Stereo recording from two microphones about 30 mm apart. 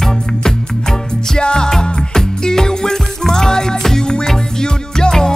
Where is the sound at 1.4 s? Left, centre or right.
Left.